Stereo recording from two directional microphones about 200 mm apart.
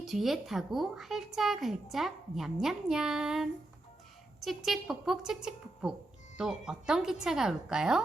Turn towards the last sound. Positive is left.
turn(degrees=-5)  # may be behind; listen again after turning